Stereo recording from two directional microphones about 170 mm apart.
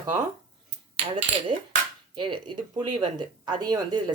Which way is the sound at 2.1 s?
30° right (ahead or behind).